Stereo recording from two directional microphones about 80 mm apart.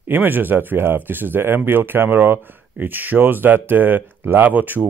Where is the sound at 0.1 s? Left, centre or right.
Right.